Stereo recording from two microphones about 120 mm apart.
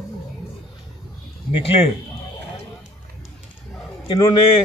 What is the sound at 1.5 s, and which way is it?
Speech, 50° left (ahead or behind).